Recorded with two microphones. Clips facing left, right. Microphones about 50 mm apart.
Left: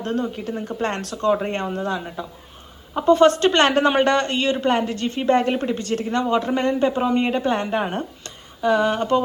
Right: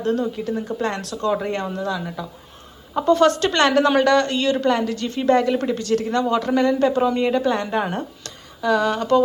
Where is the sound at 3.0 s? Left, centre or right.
Left.